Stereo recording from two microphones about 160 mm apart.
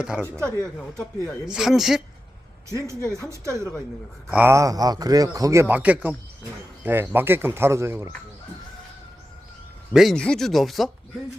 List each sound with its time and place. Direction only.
0.0 s speech: 5° right (ahead or behind)
0.3 s speech: 20° right (ahead or behind)
1.5 s speech: 5° right (ahead or behind)
2.6 s a man's voice: 20° right (ahead or behind)
9.9 s speech: centre (ahead or behind)